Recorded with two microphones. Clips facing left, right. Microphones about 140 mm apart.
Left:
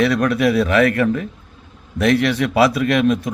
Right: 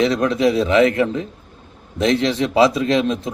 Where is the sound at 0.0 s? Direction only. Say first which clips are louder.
Even; 25° right (ahead or behind).